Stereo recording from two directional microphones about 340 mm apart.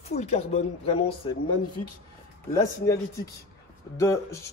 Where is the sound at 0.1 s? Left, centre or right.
Centre.